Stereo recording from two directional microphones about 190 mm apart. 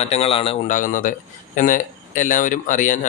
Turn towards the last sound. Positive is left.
turn(degrees=40)  # may be behind; listen again after turning